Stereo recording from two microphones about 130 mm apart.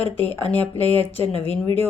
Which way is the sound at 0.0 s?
50° left (ahead or behind).